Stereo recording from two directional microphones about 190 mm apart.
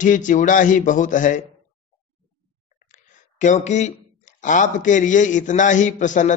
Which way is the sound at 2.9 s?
40° left (ahead or behind).